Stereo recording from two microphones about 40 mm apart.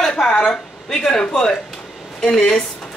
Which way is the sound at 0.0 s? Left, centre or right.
Left.